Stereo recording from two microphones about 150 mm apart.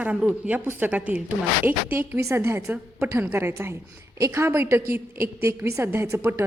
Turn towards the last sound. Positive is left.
turn(degrees=-15)  # may be behind; listen again after turning